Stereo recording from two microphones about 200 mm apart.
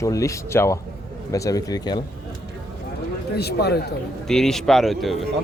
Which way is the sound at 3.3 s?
55° left (ahead or behind).